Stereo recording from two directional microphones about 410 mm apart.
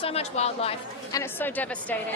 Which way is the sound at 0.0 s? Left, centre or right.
Centre.